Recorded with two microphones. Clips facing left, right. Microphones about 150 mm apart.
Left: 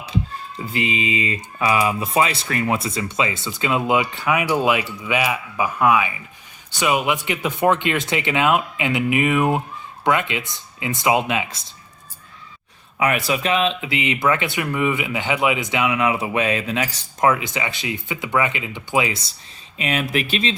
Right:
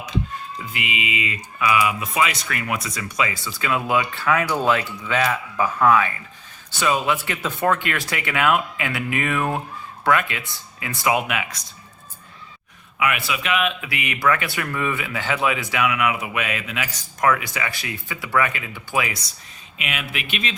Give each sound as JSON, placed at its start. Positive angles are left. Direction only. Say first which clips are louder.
{"t": 0.6, "sound": "speech", "louder": "left 7 dB", "side_deg": 30}
{"t": 13.0, "sound": "speech", "louder": "left 4 dB", "side_deg": 40}
{"t": 19.8, "sound": "speech", "louder": "left 8 dB", "side_deg": 35}